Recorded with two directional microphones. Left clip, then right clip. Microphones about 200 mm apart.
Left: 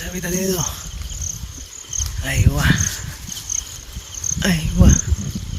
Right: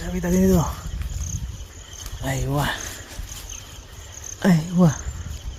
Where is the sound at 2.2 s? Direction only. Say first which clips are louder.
Left 2 dB; 15° right (ahead or behind).